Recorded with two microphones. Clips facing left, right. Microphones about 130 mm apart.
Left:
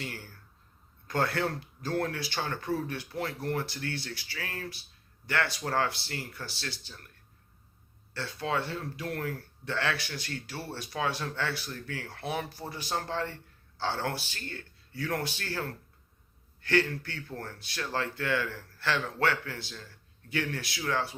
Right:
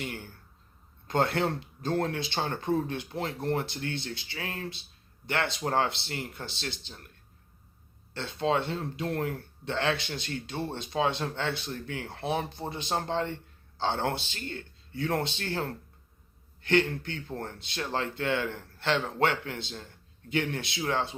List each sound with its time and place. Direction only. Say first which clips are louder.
0.0 s speech: right 3 dB; 20° right (ahead or behind)